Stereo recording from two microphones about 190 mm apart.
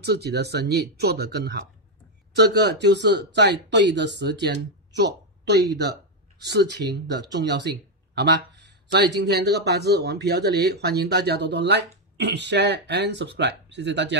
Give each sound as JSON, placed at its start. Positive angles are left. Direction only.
{"t": 0.0, "sound": "speech", "side_deg": -60}